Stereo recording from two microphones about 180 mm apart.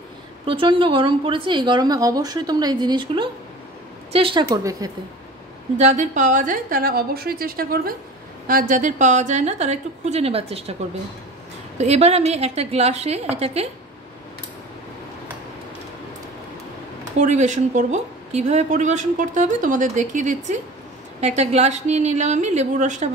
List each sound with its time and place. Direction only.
0.5 s a woman's voice: 30° right (ahead or behind)
4.5 s a woman's voice: 20° right (ahead or behind)
5.8 s a woman's voice: 40° right (ahead or behind)
11.8 s speech: 35° right (ahead or behind)
17.2 s speech: 40° right (ahead or behind)